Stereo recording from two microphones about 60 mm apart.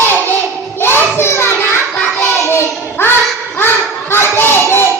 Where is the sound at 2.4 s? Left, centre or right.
Left.